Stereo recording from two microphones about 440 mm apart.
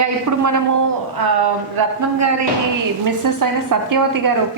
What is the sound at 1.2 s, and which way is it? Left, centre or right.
Speech, right.